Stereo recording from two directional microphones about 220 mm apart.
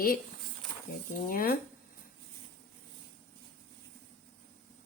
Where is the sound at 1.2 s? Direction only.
40° left (ahead or behind).